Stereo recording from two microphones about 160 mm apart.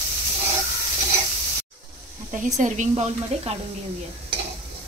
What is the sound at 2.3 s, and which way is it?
Speech, 50° right (ahead or behind).